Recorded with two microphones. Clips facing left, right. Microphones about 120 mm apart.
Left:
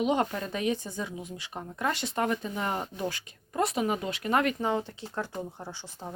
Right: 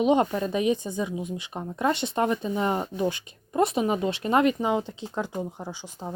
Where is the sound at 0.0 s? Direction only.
20° right (ahead or behind).